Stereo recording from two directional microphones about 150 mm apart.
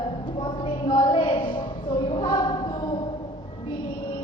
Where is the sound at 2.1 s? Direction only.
30° left (ahead or behind).